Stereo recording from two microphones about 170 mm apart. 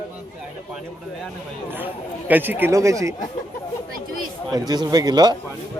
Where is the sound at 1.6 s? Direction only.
10° right (ahead or behind).